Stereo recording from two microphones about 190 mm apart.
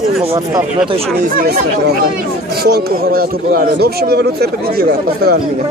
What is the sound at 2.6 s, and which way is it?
A man's voice, 55° right (ahead or behind).